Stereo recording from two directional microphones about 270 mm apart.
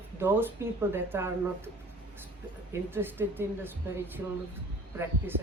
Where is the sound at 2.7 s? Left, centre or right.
Centre.